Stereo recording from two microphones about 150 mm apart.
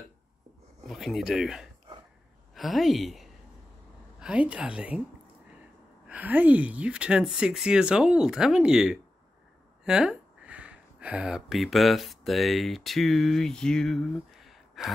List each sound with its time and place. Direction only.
0.8 s a woman's voice: centre (ahead or behind)
6.0 s speech: 10° right (ahead or behind)